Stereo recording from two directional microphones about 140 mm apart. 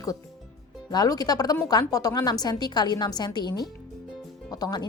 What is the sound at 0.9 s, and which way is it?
A woman's voice, 30° left (ahead or behind).